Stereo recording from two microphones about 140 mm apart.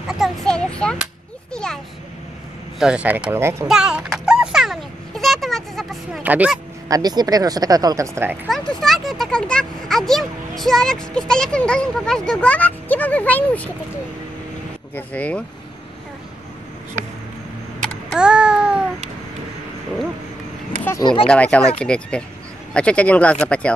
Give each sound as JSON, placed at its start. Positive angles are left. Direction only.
{"t": 0.1, "sound": "a sound", "side_deg": 0}
{"t": 2.8, "sound": "speech", "side_deg": -5}
{"t": 3.6, "sound": "a sound", "side_deg": -5}
{"t": 6.2, "sound": "speech", "side_deg": -10}
{"t": 6.9, "sound": "speech", "side_deg": -30}
{"t": 8.5, "sound": "speech", "side_deg": 5}
{"t": 15.0, "sound": "speech", "side_deg": 10}
{"t": 18.1, "sound": "babbling", "side_deg": -5}
{"t": 21.0, "sound": "speech", "side_deg": 35}
{"t": 21.3, "sound": "speech", "side_deg": 10}